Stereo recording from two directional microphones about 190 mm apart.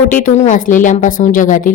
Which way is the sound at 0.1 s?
40° left (ahead or behind).